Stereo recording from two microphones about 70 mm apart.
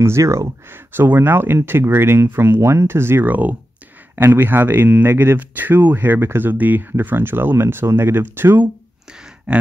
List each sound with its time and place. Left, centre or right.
0.0 s speech: right
0.9 s speech: right
9.5 s grunt: centre